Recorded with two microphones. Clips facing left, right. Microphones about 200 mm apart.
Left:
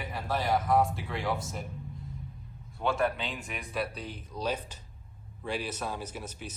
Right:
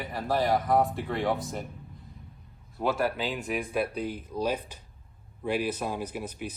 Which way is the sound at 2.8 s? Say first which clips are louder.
Right 2 dB; 5° right (ahead or behind).